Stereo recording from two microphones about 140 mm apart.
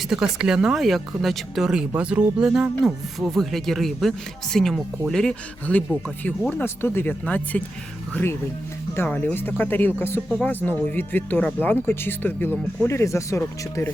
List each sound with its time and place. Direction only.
0.1 s speech: 5° right (ahead or behind); by 13.9 s 20° left (ahead or behind)